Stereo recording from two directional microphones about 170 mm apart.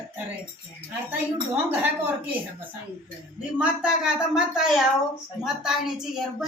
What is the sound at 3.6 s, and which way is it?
Speech, 5° right (ahead or behind).